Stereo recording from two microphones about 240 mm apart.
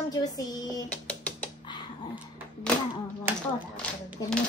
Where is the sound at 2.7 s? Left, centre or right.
Centre.